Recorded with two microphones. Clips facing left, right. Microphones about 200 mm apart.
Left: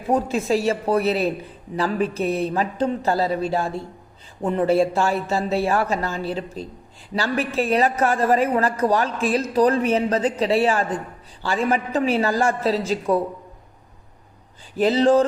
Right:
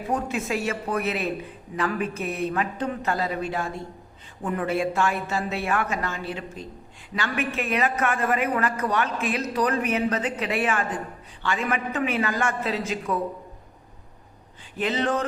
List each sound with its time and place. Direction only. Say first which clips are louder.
0.1 s a man's voice: left 7 dB; 30° left (ahead or behind)
14.8 s a man's voice: left 9 dB; 35° left (ahead or behind)